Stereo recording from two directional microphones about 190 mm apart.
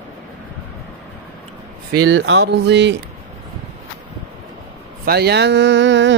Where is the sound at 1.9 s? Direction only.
70° right (ahead or behind).